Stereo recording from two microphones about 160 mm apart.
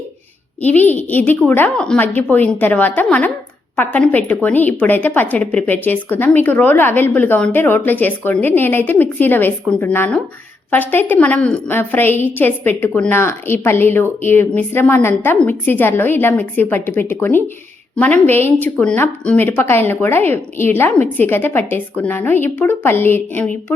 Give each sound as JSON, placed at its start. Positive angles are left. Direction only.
{"t": 0.6, "sound": "a woman's voice", "side_deg": 10}